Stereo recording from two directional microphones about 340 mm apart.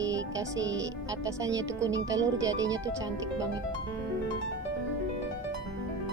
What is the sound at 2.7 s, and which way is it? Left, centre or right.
Speech, centre.